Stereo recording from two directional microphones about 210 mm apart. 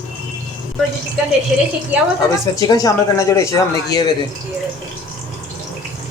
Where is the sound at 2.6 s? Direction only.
15° left (ahead or behind).